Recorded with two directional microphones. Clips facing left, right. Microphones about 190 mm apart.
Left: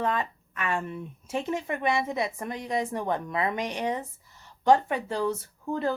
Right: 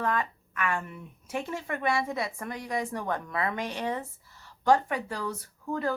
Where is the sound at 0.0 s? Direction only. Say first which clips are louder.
Left 1 dB; 25° left (ahead or behind).